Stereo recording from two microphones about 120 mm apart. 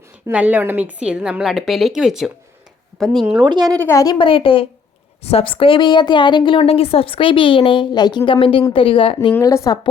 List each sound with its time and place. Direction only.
0.3 s a woman's voice: 15° right (ahead or behind)
3.4 s speech: 35° right (ahead or behind)
3.8 s a woman's voice: 30° left (ahead or behind)
4.2 s a woman's voice: 45° left (ahead or behind)
9.4 s a woman's voice: 25° left (ahead or behind)